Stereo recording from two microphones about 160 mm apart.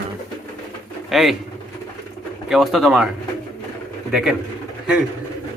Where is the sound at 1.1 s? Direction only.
Centre (ahead or behind).